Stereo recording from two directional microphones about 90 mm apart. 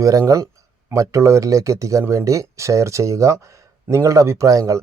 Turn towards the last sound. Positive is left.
turn(degrees=-40)  # may be behind; listen again after turning